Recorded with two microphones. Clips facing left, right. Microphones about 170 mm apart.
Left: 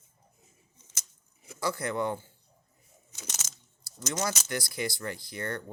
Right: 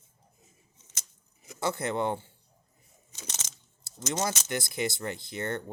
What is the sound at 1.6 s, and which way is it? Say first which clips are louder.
Speech: right 1 dB; 25° right (ahead or behind).